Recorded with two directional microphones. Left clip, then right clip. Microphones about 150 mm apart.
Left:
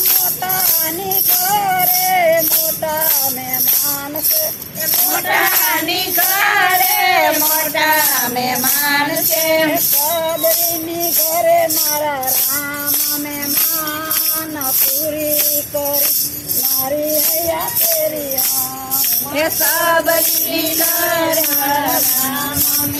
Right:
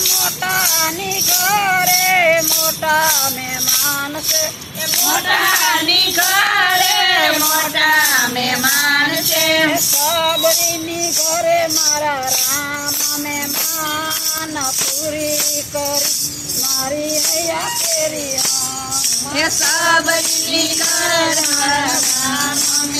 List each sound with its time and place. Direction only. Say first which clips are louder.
1.7 s music: right 2 dB; 25° left (ahead or behind)
5.6 s speech: right 4 dB; centre (ahead or behind)
9.6 s music: right 1 dB; 40° left (ahead or behind)
11.3 s music: left 3 dB; 20° left (ahead or behind)
19.4 s music: even; centre (ahead or behind)